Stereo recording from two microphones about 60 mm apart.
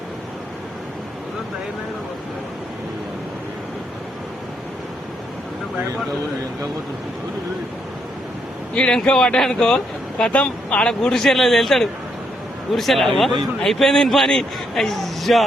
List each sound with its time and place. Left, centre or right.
8.7 s speech: centre
10.3 s a man's voice: left; by 15.4 s centre